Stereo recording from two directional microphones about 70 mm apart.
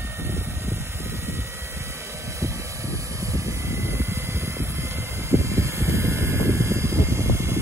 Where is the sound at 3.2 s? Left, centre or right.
Right.